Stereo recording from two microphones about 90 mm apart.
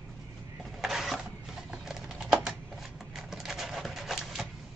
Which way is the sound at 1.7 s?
5° right (ahead or behind).